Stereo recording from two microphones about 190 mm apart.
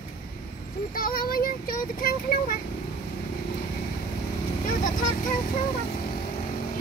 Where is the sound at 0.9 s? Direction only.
50° left (ahead or behind).